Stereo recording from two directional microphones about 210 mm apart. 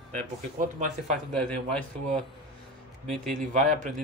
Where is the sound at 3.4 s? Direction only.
35° right (ahead or behind).